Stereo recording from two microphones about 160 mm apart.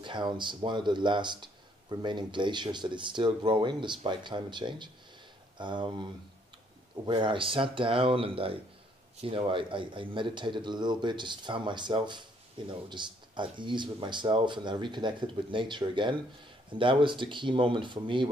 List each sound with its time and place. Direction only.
0.0 s a man's voice: 30° right (ahead or behind)
7.1 s a man's voice: 30° right (ahead or behind)